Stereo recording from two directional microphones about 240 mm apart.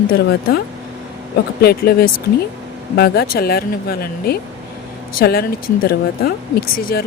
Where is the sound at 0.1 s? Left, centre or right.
Left.